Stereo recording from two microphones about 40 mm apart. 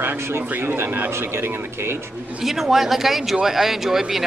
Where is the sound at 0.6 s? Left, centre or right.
Right.